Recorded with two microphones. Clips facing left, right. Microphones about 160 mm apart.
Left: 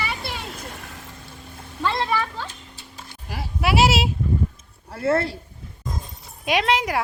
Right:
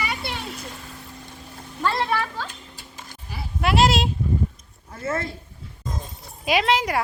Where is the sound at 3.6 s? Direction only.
5° left (ahead or behind).